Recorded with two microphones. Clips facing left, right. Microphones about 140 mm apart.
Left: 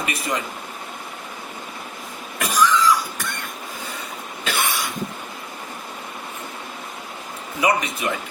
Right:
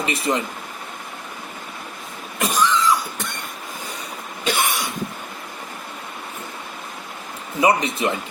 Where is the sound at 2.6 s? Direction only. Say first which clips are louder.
Left 2 dB; 25° right (ahead or behind).